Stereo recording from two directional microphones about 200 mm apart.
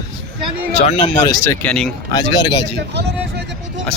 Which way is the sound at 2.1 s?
20° left (ahead or behind).